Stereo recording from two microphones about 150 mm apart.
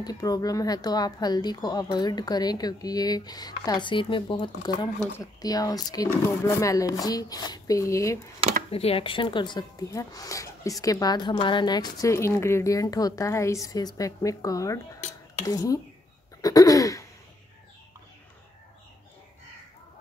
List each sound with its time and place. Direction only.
0.0 s speech: 25° left (ahead or behind)
8.7 s speech: 40° left (ahead or behind); by 15.8 s 25° left (ahead or behind)
16.3 s throat clearing: 25° left (ahead or behind)